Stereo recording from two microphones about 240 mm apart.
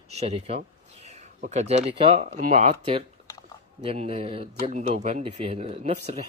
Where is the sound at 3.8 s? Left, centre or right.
Right.